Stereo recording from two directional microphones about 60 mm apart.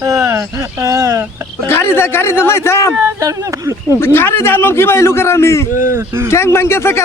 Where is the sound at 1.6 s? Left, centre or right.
Left.